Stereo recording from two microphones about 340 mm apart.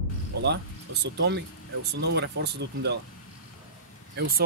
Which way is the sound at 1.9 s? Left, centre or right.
Right.